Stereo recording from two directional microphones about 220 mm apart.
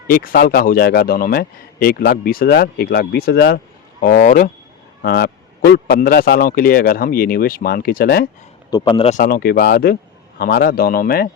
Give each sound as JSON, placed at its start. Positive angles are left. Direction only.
{"t": 0.1, "sound": "speech", "side_deg": 40}
{"t": 8.7, "sound": "speech", "side_deg": 20}